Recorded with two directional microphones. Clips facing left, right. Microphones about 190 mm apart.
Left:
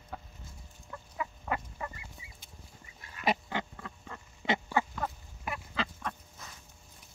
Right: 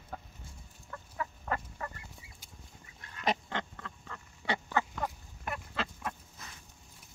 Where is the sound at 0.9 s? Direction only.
10° left (ahead or behind).